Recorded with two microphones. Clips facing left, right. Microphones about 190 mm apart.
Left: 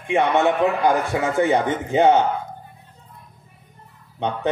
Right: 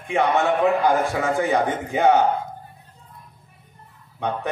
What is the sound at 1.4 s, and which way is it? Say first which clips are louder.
Speech: left 5 dB; 25° left (ahead or behind).